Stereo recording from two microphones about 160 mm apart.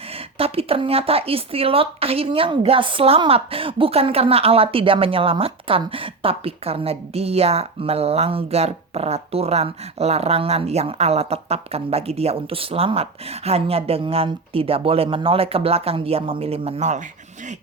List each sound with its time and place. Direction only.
0.3 s speech: 35° right (ahead or behind)